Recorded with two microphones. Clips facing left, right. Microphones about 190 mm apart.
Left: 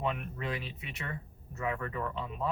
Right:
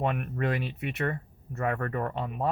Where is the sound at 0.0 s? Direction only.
60° right (ahead or behind).